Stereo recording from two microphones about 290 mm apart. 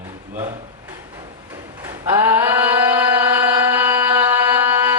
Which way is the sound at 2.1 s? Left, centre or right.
Centre.